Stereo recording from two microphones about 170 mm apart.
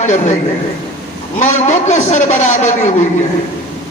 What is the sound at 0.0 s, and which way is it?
Speech, 45° left (ahead or behind).